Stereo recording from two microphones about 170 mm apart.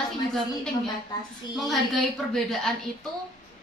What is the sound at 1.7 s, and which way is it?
A woman's voice, centre (ahead or behind).